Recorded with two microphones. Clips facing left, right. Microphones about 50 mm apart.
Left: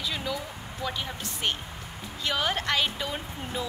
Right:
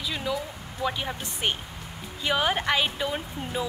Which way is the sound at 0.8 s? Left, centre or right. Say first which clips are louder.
Right 4 dB; centre.